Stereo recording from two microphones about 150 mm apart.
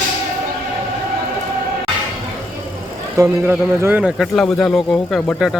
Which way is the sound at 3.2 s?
15° right (ahead or behind).